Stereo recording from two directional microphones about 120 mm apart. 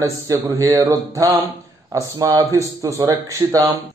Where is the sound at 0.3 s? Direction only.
25° right (ahead or behind).